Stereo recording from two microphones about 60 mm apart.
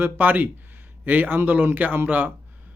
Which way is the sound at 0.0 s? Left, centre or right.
Right.